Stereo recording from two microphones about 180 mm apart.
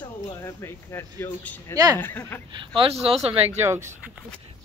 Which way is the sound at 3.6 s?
15° right (ahead or behind).